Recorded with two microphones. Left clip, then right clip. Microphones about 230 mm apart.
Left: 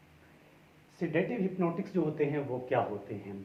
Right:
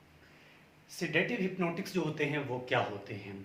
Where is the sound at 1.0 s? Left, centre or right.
Right.